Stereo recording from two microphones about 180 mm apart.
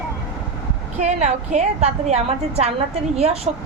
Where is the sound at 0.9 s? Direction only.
40° right (ahead or behind).